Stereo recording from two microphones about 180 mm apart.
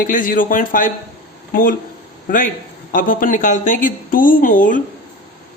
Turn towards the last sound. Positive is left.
turn(degrees=45)  # may be behind; listen again after turning